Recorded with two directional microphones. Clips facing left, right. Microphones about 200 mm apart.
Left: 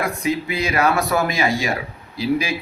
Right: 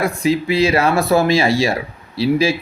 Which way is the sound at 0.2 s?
30° right (ahead or behind).